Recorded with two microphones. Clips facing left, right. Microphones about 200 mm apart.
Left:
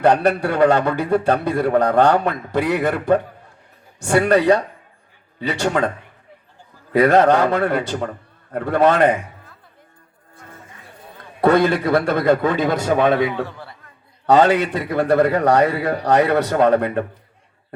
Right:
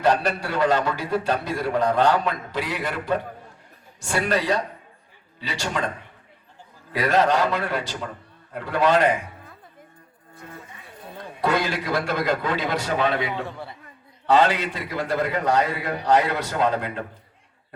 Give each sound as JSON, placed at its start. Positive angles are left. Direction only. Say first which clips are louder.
{"t": 0.0, "sound": "a man's voice", "louder": "left 6 dB", "side_deg": 60}
{"t": 6.9, "sound": "a man's voice", "louder": "left 7 dB", "side_deg": 60}
{"t": 11.3, "sound": "a man's voice", "louder": "left 9 dB", "side_deg": 60}